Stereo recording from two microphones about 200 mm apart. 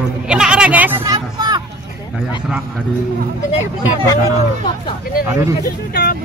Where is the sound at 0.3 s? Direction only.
5° right (ahead or behind); by 1.6 s 20° right (ahead or behind).